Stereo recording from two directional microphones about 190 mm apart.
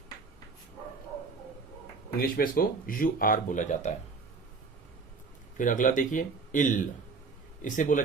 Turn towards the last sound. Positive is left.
turn(degrees=45)  # may be behind; listen again after turning